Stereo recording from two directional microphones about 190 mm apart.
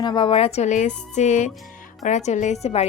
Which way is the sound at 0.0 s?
25° left (ahead or behind).